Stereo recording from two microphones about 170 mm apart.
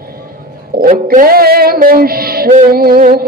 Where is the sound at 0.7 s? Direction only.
55° right (ahead or behind).